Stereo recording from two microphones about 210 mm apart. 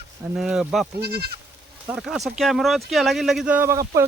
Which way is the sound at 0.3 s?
Centre (ahead or behind).